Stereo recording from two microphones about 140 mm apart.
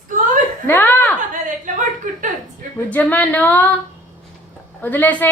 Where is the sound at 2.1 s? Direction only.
70° right (ahead or behind).